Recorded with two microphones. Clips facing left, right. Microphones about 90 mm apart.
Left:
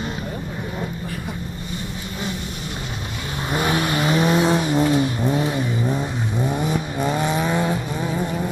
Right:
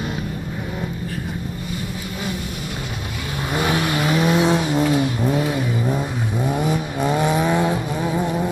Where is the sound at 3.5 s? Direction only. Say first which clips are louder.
Even; 15° left (ahead or behind).